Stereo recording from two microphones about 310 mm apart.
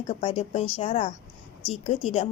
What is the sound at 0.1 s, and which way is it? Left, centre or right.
A woman's voice, centre.